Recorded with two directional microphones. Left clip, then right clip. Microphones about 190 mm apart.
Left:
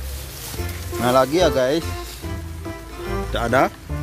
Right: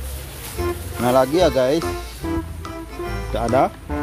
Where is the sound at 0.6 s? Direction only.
Centre (ahead or behind).